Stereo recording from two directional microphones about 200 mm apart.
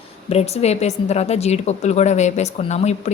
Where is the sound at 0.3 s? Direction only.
30° left (ahead or behind).